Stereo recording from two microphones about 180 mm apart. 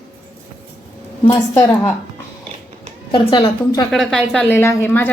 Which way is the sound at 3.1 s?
25° left (ahead or behind).